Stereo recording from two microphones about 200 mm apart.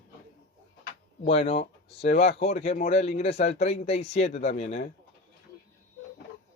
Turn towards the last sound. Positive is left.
turn(degrees=35)  # may be behind; listen again after turning